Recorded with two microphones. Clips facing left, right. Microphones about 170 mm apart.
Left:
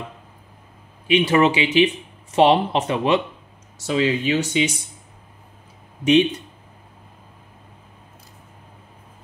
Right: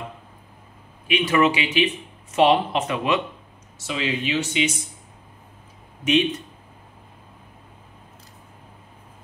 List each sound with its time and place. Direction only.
1.0 s speech: 30° left (ahead or behind)